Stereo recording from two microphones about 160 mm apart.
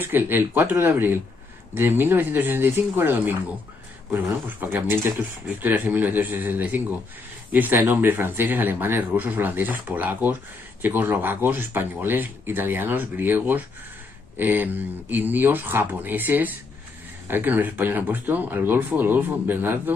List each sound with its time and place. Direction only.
0.0 s speech: 15° right (ahead or behind)